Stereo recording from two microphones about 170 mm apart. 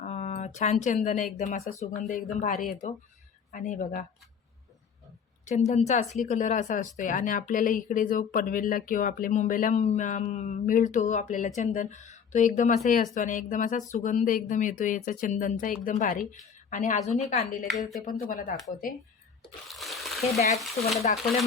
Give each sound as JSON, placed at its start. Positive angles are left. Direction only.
{"t": 0.0, "sound": "speech", "side_deg": 45}
{"t": 5.5, "sound": "a woman's voice", "side_deg": 40}
{"t": 17.7, "sound": "speech", "side_deg": 0}
{"t": 18.0, "sound": "speech", "side_deg": 55}
{"t": 19.7, "sound": "a sound", "side_deg": 0}
{"t": 21.0, "sound": "speech", "side_deg": 45}